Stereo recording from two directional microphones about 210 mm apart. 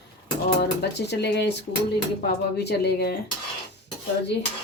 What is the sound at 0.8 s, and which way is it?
Speech, 55° left (ahead or behind).